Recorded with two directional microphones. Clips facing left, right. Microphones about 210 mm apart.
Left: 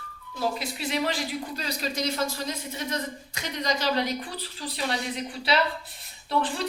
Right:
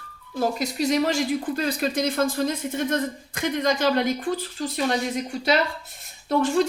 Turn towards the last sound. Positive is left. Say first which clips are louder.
# right 7 dB
turn(degrees=-45)  # may be behind; listen again after turning